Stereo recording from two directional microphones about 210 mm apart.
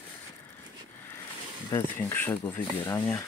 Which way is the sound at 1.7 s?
10° left (ahead or behind).